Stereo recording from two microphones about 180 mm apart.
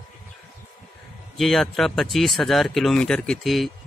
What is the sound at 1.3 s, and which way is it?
Speech, centre (ahead or behind).